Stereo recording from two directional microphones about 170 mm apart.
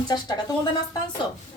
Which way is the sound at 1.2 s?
25° left (ahead or behind).